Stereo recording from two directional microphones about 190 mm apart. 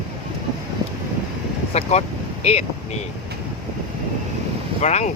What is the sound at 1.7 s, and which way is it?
Speech, 35° left (ahead or behind).